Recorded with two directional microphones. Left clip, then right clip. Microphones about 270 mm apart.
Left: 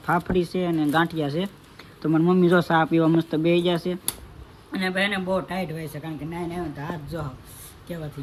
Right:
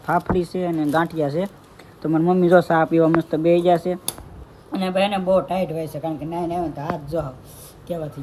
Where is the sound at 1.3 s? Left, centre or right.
Centre.